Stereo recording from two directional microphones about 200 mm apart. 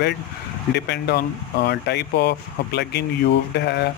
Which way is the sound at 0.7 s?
55° left (ahead or behind).